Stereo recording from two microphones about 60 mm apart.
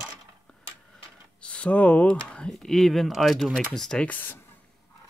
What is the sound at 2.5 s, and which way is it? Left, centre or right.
Speech, centre.